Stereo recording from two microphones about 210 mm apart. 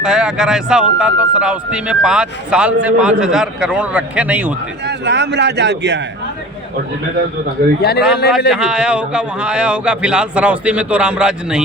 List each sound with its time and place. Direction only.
0.0 s a man's voice: 5° right (ahead or behind)
4.9 s a man's voice: 55° right (ahead or behind)
7.8 s a man's voice: 50° left (ahead or behind)
8.4 s a man's voice: 5° right (ahead or behind)